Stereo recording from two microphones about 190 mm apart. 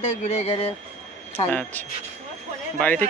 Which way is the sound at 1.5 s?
10° left (ahead or behind).